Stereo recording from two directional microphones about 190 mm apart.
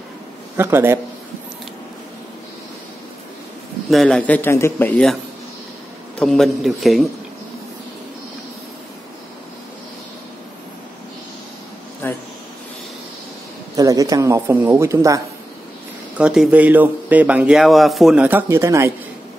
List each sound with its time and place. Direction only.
0.6 s speech: 10° right (ahead or behind)
3.9 s a man's voice: 5° left (ahead or behind)
6.1 s a man's voice: 5° left (ahead or behind)
12.0 s speech: 10° left (ahead or behind)
13.7 s speech: 20° right (ahead or behind)
16.2 s speech: 5° right (ahead or behind)